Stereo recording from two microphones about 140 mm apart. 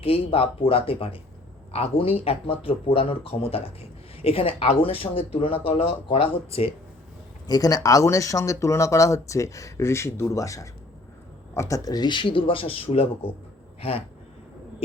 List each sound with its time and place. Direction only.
0.0 s speech: 40° left (ahead or behind)
7.4 s speech: 25° left (ahead or behind); by 13.3 s 45° left (ahead or behind)